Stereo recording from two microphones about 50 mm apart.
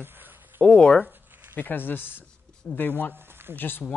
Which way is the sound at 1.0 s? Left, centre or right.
Right.